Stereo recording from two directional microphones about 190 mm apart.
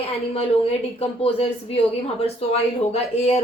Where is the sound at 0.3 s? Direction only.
30° left (ahead or behind).